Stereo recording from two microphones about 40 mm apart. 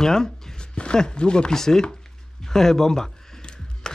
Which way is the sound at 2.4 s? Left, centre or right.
Centre.